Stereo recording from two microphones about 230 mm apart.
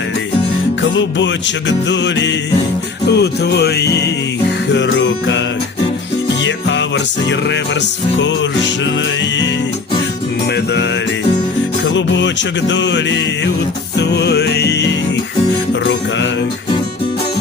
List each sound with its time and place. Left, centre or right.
0.8 s music: left
6.4 s music: left
11.9 s music: left